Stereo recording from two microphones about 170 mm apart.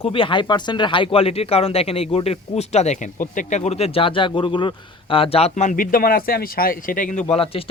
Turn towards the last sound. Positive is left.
turn(degrees=35)  # may be behind; listen again after turning